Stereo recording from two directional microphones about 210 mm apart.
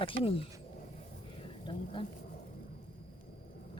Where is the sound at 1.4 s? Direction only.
25° left (ahead or behind).